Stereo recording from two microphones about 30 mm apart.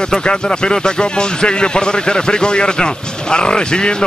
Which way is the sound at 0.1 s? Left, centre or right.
Left.